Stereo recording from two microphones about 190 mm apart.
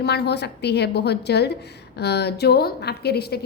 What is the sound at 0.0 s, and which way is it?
A woman's voice, 60° left (ahead or behind).